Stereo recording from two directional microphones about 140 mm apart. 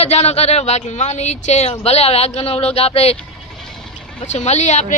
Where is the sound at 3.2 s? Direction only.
5° left (ahead or behind).